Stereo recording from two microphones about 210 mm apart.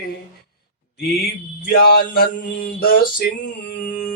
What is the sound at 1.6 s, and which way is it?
Mantra, 45° left (ahead or behind).